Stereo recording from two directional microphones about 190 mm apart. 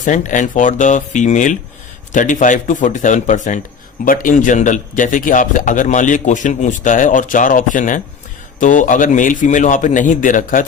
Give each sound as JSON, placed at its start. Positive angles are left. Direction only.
{"t": 0.0, "sound": "a man's voice", "side_deg": 40}